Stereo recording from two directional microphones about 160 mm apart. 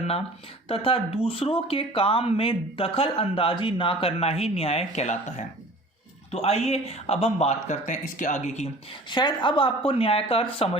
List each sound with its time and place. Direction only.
0.7 s speech: 35° left (ahead or behind)
9.0 s speech: 30° left (ahead or behind)